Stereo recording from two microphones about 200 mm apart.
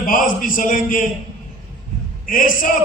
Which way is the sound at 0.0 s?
40° left (ahead or behind).